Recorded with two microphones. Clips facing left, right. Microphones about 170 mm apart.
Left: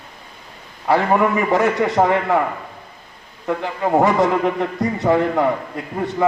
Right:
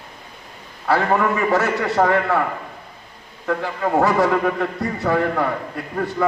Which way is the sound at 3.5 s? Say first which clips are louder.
Left 2 dB; 20° left (ahead or behind).